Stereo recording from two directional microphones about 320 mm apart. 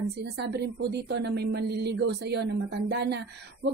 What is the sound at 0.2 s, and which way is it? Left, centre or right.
A woman's voice, right.